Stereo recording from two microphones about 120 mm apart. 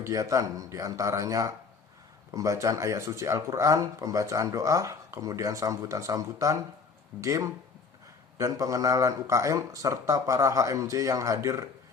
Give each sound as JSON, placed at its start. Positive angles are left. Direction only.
{"t": 0.0, "sound": "speech", "side_deg": -30}